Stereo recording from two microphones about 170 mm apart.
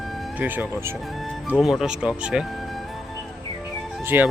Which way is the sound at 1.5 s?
Centre (ahead or behind).